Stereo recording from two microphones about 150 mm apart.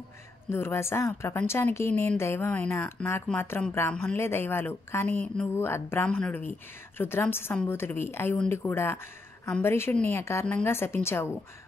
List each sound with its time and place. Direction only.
0.5 s speech: 15° left (ahead or behind)